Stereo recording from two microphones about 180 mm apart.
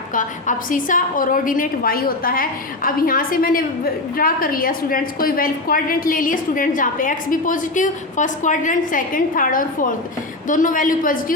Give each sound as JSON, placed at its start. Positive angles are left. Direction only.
{"t": 0.1, "sound": "a woman's voice", "side_deg": 45}